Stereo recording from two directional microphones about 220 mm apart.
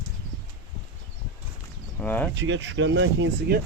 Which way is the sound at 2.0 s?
10° left (ahead or behind).